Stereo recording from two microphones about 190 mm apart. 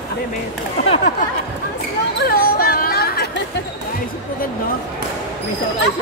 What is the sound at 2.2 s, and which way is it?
Music, 50° left (ahead or behind).